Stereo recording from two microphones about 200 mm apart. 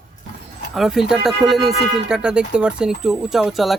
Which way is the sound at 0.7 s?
Centre (ahead or behind).